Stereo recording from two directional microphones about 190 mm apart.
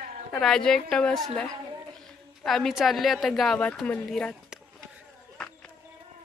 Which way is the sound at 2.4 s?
Centre (ahead or behind).